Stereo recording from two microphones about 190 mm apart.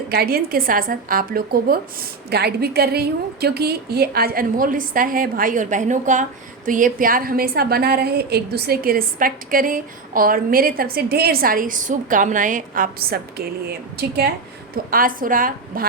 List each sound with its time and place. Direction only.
0.1 s a woman's voice: 55° right (ahead or behind)
14.8 s a woman's voice: 50° right (ahead or behind)